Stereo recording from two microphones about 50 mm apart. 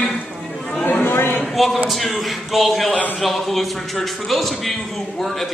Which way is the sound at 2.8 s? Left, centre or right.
Left.